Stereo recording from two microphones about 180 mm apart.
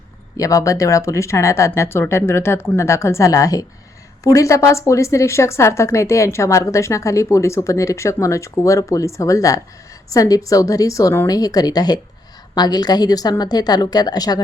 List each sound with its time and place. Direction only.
0.3 s a woman's voice: 20° left (ahead or behind)